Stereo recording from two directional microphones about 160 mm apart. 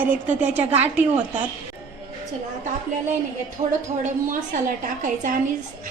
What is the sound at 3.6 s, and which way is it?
A woman's voice, 50° right (ahead or behind).